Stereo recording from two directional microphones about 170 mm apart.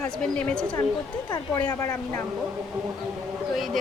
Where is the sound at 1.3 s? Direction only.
20° left (ahead or behind).